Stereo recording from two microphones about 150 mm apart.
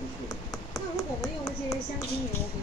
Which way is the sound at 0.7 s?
25° left (ahead or behind).